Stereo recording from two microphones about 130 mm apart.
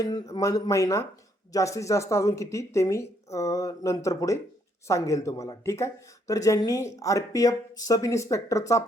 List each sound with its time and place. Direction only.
0.0 s speech: 30° left (ahead or behind)